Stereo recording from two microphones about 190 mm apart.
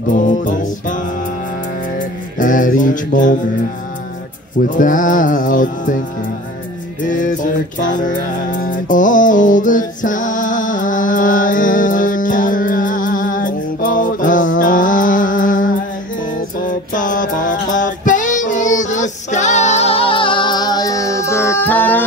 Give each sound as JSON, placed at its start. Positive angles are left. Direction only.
{"t": 0.1, "sound": "music", "side_deg": 45}
{"t": 2.3, "sound": "mantra", "side_deg": 45}
{"t": 4.6, "sound": "music", "side_deg": 45}
{"t": 7.1, "sound": "music", "side_deg": 45}